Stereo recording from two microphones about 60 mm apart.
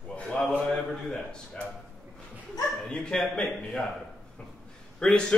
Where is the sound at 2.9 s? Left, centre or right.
Centre.